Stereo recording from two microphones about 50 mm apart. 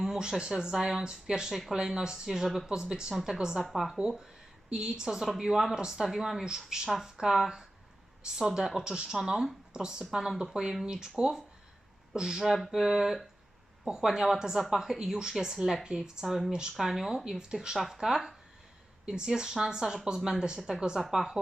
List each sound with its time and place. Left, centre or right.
0.0 s a woman's voice: centre
3.6 s speech: centre
3.9 s a woman's voice: centre
6.8 s a woman's voice: centre
16.5 s a woman's voice: centre
16.7 s a woman's voice: centre